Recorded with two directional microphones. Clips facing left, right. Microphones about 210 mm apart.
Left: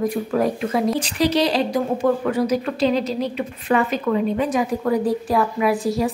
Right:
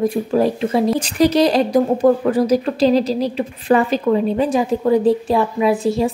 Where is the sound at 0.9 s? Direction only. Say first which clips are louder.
Right 5 dB; 45° right (ahead or behind).